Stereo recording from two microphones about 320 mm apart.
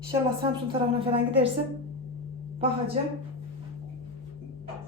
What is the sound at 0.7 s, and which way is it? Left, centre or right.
Speech, centre.